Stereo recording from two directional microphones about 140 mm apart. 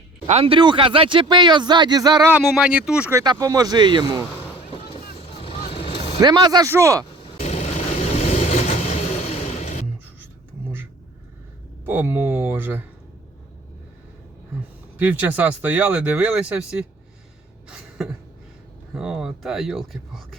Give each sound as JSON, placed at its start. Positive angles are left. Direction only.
{"t": 0.3, "sound": "a man's voice", "side_deg": -45}
{"t": 2.4, "sound": "speech", "side_deg": 5}
{"t": 2.6, "sound": "speech", "side_deg": -5}
{"t": 3.1, "sound": "speech", "side_deg": -20}
{"t": 4.7, "sound": "vehicle", "side_deg": 45}
{"t": 6.2, "sound": "speech", "side_deg": -30}
{"t": 7.3, "sound": "vehicle", "side_deg": 50}
{"t": 9.6, "sound": "music", "side_deg": 55}
{"t": 11.9, "sound": "speech", "side_deg": -15}
{"t": 14.9, "sound": "speech", "side_deg": -10}
{"t": 17.7, "sound": "a sound", "side_deg": -5}
{"t": 18.9, "sound": "speech", "side_deg": -5}